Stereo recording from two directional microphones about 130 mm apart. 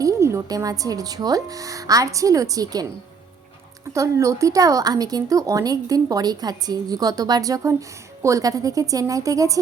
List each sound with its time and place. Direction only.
0.0 s speech: 20° right (ahead or behind)
3.9 s speech: 25° right (ahead or behind)